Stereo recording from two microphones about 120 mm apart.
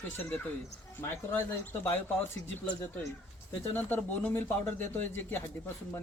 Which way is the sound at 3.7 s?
15° left (ahead or behind).